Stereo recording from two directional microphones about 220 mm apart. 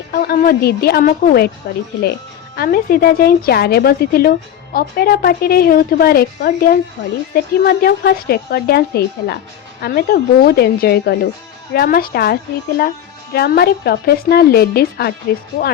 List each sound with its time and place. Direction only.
0.1 s a woman's voice: 40° left (ahead or behind)